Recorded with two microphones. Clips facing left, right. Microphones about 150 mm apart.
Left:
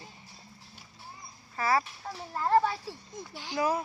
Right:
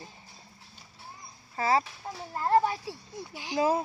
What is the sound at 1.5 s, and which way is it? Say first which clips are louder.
Speech: right 2 dB; 25° right (ahead or behind).